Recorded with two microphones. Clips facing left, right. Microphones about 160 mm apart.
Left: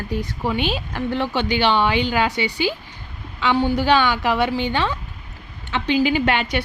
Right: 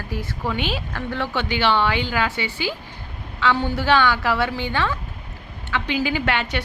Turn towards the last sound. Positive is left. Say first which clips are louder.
# left 3 dB
turn(degrees=15)  # may be behind; listen again after turning